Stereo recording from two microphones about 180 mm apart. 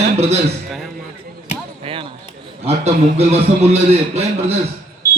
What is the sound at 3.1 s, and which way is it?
A man's voice, 35° right (ahead or behind).